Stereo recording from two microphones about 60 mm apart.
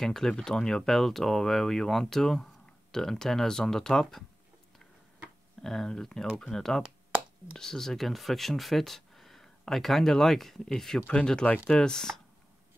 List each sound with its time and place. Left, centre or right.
0.0 s speech: centre
5.6 s speech: centre